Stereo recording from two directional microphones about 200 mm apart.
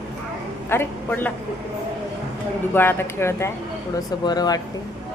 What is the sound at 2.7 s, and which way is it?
Speech, 10° left (ahead or behind).